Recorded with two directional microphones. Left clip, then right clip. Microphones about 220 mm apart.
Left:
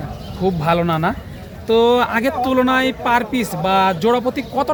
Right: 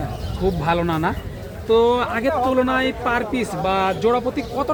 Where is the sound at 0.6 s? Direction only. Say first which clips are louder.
Left 4 dB; 50° left (ahead or behind).